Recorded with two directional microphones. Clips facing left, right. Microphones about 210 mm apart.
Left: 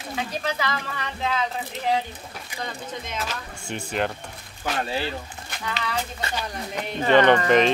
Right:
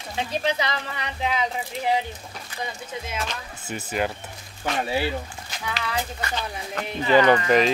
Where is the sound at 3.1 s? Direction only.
Centre (ahead or behind).